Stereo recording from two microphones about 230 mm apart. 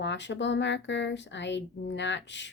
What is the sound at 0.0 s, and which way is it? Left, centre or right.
Speech, left.